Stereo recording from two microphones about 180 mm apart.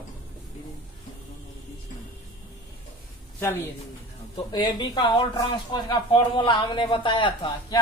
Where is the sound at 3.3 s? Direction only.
10° left (ahead or behind).